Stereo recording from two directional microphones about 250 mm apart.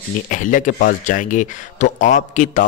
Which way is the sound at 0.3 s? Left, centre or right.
Left.